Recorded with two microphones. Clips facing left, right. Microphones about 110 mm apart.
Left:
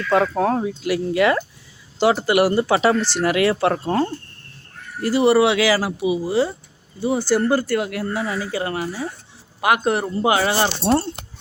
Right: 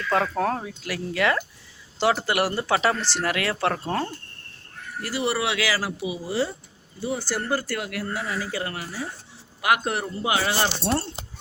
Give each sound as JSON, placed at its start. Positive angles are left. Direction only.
{"t": 0.1, "sound": "speech", "side_deg": 15}
{"t": 5.0, "sound": "a man's voice", "side_deg": 25}
{"t": 10.0, "sound": "a man's voice", "side_deg": 40}
{"t": 10.8, "sound": "speech", "side_deg": 25}